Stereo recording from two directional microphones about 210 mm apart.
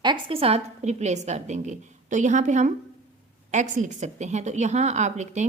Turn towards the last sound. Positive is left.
turn(degrees=-35)  # may be behind; listen again after turning